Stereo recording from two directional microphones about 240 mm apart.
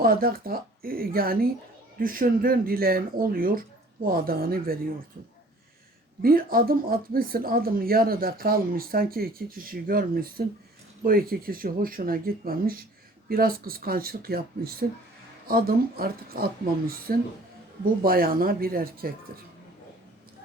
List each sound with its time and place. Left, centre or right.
0.0 s speech: right
6.2 s speech: right